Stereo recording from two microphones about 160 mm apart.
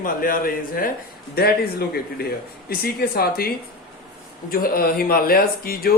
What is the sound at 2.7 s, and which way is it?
Speech, 70° left (ahead or behind).